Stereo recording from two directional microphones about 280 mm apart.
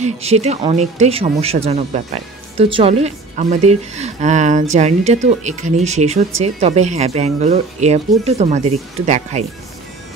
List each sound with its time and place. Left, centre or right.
0.0 s speech: right